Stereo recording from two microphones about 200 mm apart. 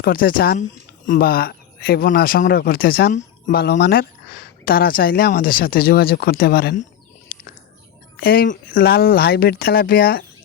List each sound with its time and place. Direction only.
0.0 s speech: 45° left (ahead or behind)
7.3 s a sound: 50° left (ahead or behind)
8.2 s speech: 50° left (ahead or behind)